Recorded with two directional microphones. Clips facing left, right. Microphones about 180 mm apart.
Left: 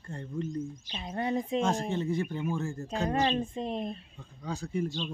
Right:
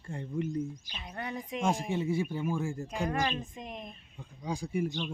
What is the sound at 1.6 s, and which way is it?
Speech, 10° right (ahead or behind).